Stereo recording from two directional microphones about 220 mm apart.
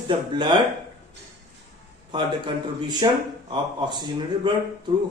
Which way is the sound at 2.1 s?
20° right (ahead or behind).